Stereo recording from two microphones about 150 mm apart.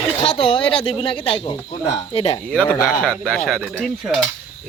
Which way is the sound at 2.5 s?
10° left (ahead or behind).